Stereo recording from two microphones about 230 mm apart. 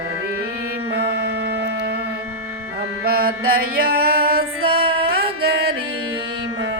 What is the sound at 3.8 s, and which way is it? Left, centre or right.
Music, right.